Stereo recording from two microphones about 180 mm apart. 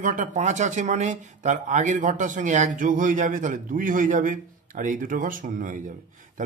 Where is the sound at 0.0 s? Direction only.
45° right (ahead or behind).